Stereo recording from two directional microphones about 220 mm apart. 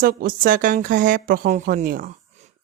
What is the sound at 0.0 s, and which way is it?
A woman's voice, 40° right (ahead or behind).